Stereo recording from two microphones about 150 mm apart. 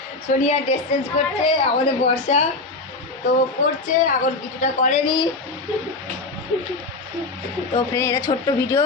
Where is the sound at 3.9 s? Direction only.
60° left (ahead or behind).